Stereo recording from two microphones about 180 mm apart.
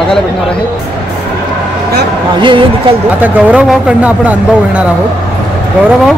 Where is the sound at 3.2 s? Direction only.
10° right (ahead or behind).